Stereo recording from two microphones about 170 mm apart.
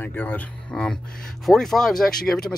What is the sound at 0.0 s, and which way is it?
Speech, 10° left (ahead or behind).